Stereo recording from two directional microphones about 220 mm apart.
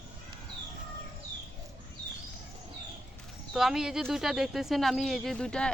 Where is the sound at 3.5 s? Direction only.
Centre (ahead or behind).